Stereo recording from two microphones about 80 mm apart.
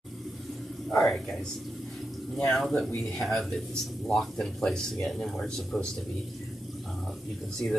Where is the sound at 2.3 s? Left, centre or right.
Centre.